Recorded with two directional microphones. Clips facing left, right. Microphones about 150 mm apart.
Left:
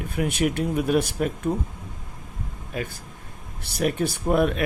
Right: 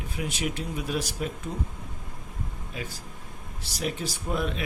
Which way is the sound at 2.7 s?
55° left (ahead or behind).